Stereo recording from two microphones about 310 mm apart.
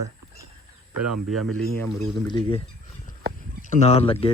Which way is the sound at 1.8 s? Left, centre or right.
Centre.